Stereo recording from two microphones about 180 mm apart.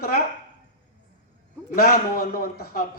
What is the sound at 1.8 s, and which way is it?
A man's voice, 50° left (ahead or behind).